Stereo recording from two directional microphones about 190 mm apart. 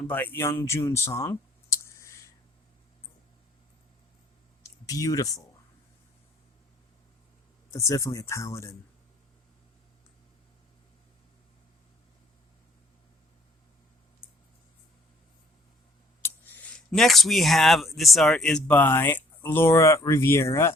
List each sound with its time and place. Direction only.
0.1 s speech: 10° left (ahead or behind)
4.6 s speech: 15° left (ahead or behind)
7.7 s speech: 15° left (ahead or behind)
16.2 s speech: 10° left (ahead or behind)